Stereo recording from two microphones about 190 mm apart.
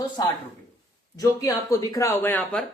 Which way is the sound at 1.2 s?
20° left (ahead or behind).